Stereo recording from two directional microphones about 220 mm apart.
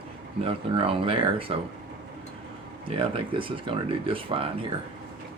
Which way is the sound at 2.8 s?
25° right (ahead or behind).